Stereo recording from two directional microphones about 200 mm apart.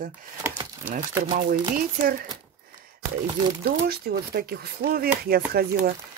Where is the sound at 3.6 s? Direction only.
50° right (ahead or behind).